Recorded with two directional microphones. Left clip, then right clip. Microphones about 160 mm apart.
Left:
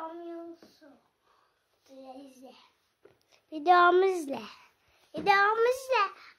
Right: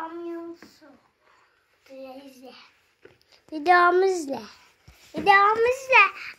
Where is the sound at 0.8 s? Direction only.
20° left (ahead or behind).